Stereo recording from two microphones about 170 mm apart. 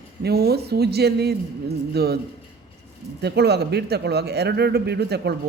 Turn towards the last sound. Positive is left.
turn(degrees=-75)  # may be behind; listen again after turning